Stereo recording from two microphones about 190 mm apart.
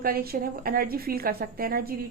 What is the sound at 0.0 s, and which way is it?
A woman's voice, 50° right (ahead or behind).